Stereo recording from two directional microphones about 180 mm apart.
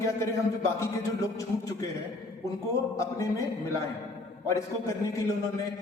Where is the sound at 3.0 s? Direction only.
20° left (ahead or behind).